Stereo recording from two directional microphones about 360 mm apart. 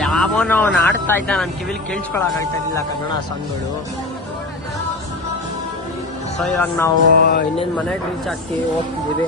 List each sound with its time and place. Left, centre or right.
0.0 s speech: centre
6.4 s speech: centre
7.2 s music: left